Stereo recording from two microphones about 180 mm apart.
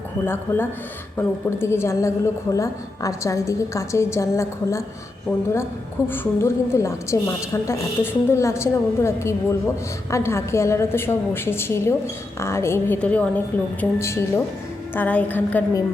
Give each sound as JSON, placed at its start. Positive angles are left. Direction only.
{"t": 0.3, "sound": "a woman's voice", "side_deg": 10}
{"t": 6.1, "sound": "a woman's voice", "side_deg": 15}